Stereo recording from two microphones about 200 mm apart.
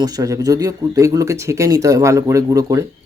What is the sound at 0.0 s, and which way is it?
Speech, 20° right (ahead or behind).